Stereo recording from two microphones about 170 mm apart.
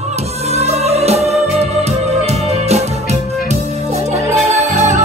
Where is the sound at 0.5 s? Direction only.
40° right (ahead or behind).